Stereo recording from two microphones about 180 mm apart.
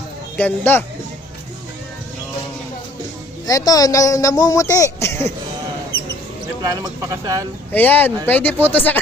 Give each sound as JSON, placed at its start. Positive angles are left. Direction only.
{"t": 0.3, "sound": "speech", "side_deg": 10}
{"t": 3.4, "sound": "speech", "side_deg": 20}
{"t": 6.6, "sound": "speech", "side_deg": -20}
{"t": 7.7, "sound": "speech", "side_deg": 10}